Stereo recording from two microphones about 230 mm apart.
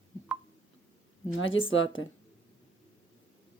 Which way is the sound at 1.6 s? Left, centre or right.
Left.